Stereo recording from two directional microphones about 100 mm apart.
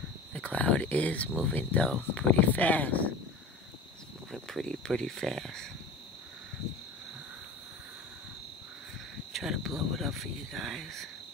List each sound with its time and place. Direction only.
0.3 s a sound: 15° left (ahead or behind)
1.4 s speech: 15° left (ahead or behind)
4.3 s speech: 5° left (ahead or behind)
9.3 s cricket: 5° right (ahead or behind)
9.8 s speech: centre (ahead or behind)